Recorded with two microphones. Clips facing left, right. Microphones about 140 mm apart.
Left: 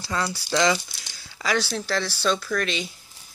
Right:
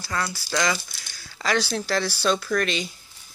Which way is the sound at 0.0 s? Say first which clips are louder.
Left 1 dB; 20° left (ahead or behind).